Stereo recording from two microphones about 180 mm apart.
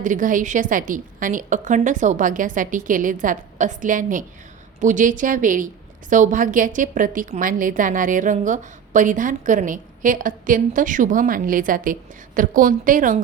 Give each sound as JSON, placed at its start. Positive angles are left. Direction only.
{"t": 0.0, "sound": "a woman's voice", "side_deg": -45}